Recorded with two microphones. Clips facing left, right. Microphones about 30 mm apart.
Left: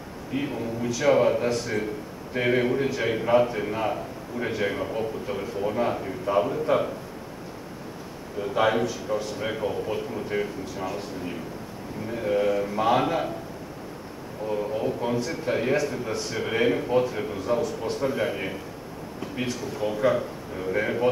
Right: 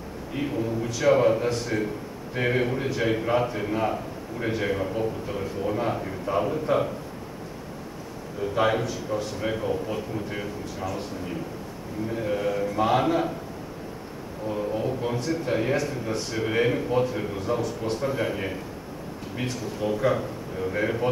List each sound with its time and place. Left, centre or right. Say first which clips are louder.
0.3 s a man's voice: right 1 dB; centre
8.4 s a man's voice: left 1 dB; centre
12.1 s a man's voice: left 3 dB; centre
14.5 s a man's voice: left 1 dB; centre